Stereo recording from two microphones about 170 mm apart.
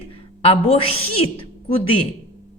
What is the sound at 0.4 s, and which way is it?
Speech, 35° left (ahead or behind).